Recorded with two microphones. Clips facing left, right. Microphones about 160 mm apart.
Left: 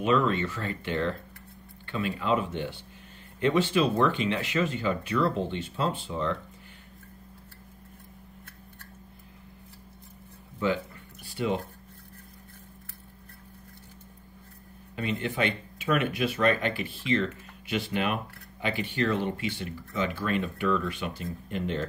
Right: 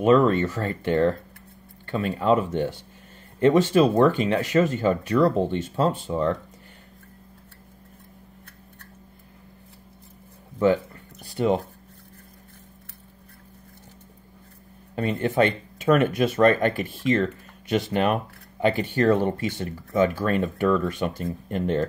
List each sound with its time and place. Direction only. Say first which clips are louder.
0.0 s speech: right 7 dB; 45° right (ahead or behind)
11.2 s speech: right 7 dB; 45° right (ahead or behind)
15.0 s speech: right 7 dB; 45° right (ahead or behind)